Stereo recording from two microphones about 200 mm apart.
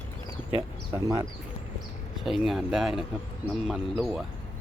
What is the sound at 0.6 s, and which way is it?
Speech, 15° right (ahead or behind).